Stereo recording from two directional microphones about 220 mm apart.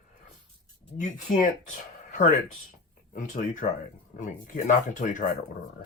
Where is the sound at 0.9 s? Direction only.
35° left (ahead or behind).